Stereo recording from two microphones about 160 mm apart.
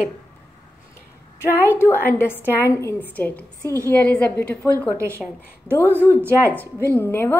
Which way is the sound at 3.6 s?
20° right (ahead or behind).